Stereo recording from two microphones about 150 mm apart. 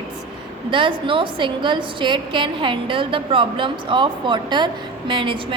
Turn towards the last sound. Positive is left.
turn(degrees=-35)  # may be behind; listen again after turning